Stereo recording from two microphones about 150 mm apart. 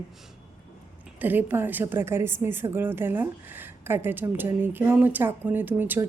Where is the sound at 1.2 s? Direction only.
15° right (ahead or behind).